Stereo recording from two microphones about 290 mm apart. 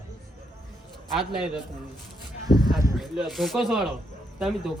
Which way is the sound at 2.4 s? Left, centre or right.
Left.